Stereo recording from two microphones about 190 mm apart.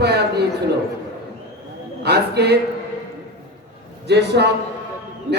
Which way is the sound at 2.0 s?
60° right (ahead or behind).